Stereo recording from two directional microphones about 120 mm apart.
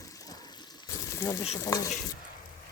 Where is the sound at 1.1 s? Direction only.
25° left (ahead or behind).